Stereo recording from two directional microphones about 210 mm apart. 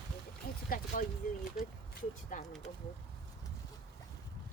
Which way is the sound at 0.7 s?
45° left (ahead or behind).